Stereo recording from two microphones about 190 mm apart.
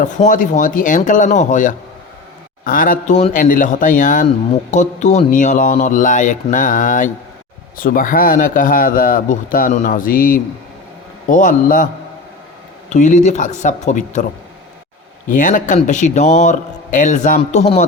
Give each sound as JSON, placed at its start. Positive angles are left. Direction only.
{"t": 0.0, "sound": "speech", "side_deg": 40}
{"t": 12.9, "sound": "speech", "side_deg": 40}
{"t": 15.3, "sound": "speech", "side_deg": 45}